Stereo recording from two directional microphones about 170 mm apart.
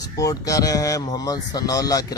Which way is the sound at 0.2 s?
20° left (ahead or behind).